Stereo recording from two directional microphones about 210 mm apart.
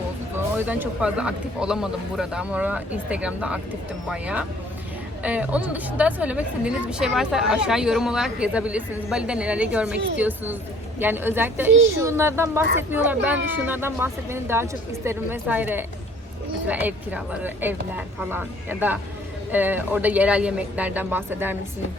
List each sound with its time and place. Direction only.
0.3 s a woman's voice: 10° right (ahead or behind)